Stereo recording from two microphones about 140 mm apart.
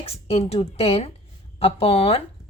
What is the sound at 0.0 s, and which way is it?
A woman's voice, 45° left (ahead or behind).